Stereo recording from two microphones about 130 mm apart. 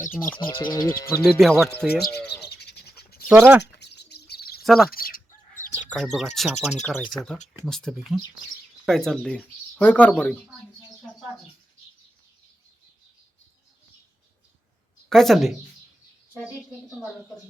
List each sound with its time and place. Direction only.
0.3 s speech: 40° left (ahead or behind)
1.2 s speech: centre (ahead or behind)
3.2 s speech: 15° right (ahead or behind)
4.6 s speech: centre (ahead or behind)
4.9 s chicken: 90° left
5.9 s speech: centre (ahead or behind)
15.1 s speech: centre (ahead or behind)